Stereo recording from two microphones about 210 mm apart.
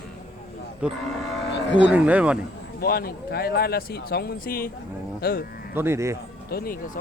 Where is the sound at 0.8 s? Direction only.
5° right (ahead or behind).